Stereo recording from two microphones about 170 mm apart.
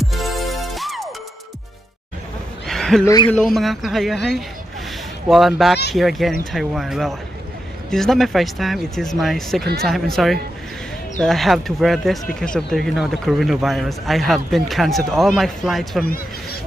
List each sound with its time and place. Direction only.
0.0 s music: centre (ahead or behind)
2.6 s a sound: centre (ahead or behind)
3.3 s a man's voice: centre (ahead or behind)